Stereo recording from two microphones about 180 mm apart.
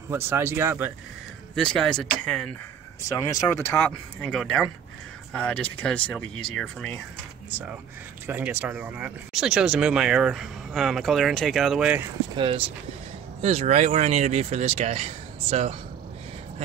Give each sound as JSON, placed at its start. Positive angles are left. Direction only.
{"t": 0.1, "sound": "speech", "side_deg": -15}
{"t": 1.5, "sound": "speech", "side_deg": 5}
{"t": 3.1, "sound": "speech", "side_deg": 20}
{"t": 8.3, "sound": "speech", "side_deg": -10}
{"t": 12.4, "sound": "speech", "side_deg": -30}